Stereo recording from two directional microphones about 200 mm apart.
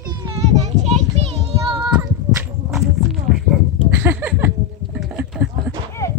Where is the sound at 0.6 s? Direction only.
35° right (ahead or behind).